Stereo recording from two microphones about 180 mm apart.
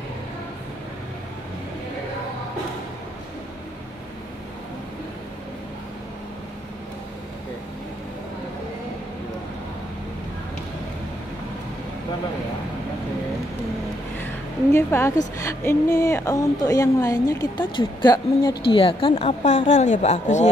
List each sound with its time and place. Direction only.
14.7 s a woman's voice: 15° left (ahead or behind); by 20.4 s 40° left (ahead or behind)